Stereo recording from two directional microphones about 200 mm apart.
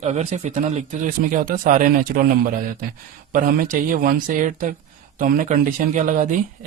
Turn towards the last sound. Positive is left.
turn(degrees=-40)  # may be behind; listen again after turning